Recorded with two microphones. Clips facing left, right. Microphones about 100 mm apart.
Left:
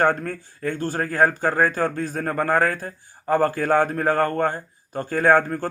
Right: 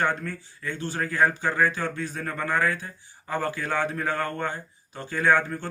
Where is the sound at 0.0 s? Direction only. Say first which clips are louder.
Left 6 dB; 45° left (ahead or behind).